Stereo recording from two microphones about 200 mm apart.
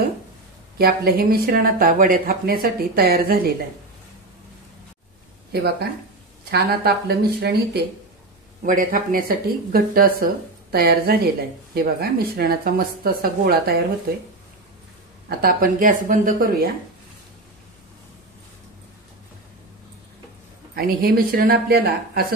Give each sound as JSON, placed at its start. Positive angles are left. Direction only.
{"t": 0.7, "sound": "speech", "side_deg": -50}
{"t": 5.5, "sound": "speech", "side_deg": -55}
{"t": 15.2, "sound": "speech", "side_deg": -45}
{"t": 20.7, "sound": "speech", "side_deg": -50}